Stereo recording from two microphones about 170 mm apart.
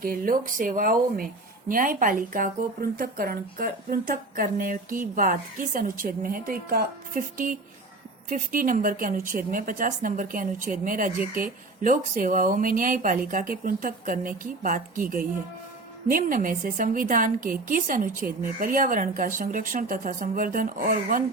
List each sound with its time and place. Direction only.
0.0 s a woman's voice: 55° right (ahead or behind)